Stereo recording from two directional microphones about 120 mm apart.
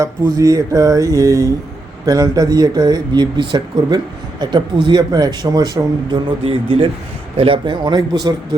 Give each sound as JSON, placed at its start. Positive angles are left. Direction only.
{"t": 0.0, "sound": "a sound", "side_deg": -30}
{"t": 2.0, "sound": "speech", "side_deg": -30}
{"t": 6.4, "sound": "speech", "side_deg": -55}